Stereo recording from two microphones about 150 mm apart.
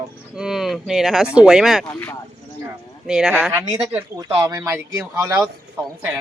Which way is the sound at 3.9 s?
20° right (ahead or behind).